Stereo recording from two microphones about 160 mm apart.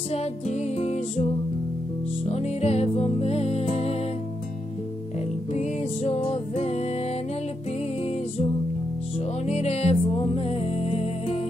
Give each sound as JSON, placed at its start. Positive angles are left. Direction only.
{"t": 0.1, "sound": "music", "side_deg": 40}
{"t": 5.5, "sound": "music", "side_deg": 45}
{"t": 9.2, "sound": "music", "side_deg": 40}